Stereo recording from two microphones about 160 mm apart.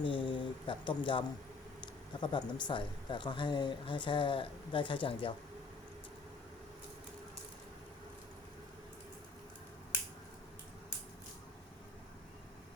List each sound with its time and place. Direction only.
0.0 s speech: 30° left (ahead or behind)